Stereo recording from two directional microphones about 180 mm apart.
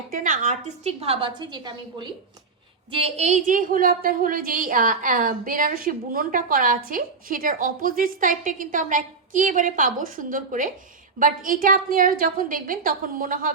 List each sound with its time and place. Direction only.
0.1 s a woman's voice: 45° right (ahead or behind); by 2.0 s 25° right (ahead or behind)
2.9 s a woman's voice: 35° right (ahead or behind); by 13.5 s 50° right (ahead or behind)